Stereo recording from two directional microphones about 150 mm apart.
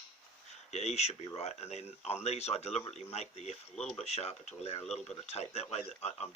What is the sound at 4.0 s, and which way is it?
Speech, 45° left (ahead or behind).